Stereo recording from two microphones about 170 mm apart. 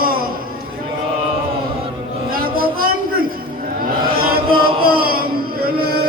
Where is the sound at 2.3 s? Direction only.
60° right (ahead or behind).